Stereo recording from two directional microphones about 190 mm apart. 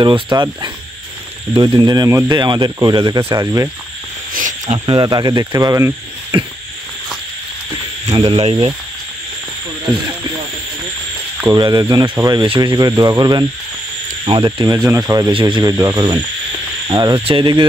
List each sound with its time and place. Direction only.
0.0 s speech: 25° right (ahead or behind)
4.3 s wild animals: 45° right (ahead or behind)
4.8 s speech: 25° right (ahead or behind)
8.1 s speech: 25° right (ahead or behind)
11.5 s speech: 20° right (ahead or behind)